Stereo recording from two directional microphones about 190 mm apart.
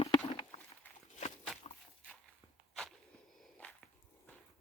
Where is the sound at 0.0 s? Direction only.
30° left (ahead or behind).